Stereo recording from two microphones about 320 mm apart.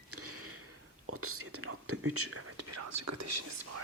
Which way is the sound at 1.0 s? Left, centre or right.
Right.